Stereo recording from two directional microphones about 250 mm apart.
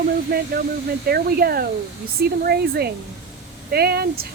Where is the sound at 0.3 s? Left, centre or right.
Right.